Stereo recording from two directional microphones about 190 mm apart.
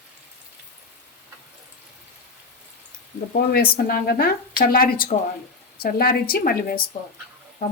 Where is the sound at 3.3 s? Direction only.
55° left (ahead or behind).